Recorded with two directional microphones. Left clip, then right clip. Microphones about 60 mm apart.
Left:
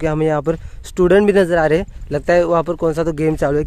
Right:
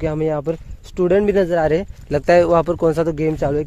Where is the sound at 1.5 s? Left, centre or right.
Left.